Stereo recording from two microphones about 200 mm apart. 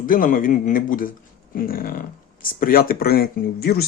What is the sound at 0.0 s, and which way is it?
Speech, 45° left (ahead or behind).